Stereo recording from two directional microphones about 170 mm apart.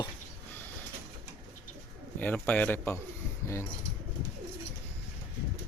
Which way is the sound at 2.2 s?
10° left (ahead or behind).